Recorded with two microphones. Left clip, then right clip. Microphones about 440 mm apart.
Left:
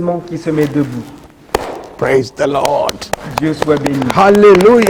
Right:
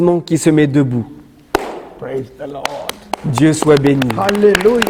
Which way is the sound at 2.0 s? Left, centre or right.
Left.